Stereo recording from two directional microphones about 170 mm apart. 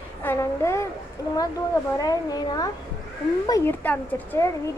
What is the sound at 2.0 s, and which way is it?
A woman's voice, 20° left (ahead or behind).